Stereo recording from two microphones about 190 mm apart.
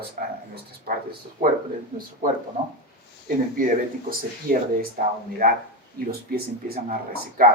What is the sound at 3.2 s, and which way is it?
Speech, 45° right (ahead or behind).